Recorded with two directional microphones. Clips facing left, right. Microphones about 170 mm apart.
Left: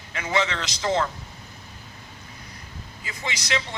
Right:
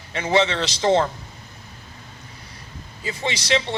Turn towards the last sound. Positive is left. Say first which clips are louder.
# right 6 dB
turn(degrees=-30)  # may be behind; listen again after turning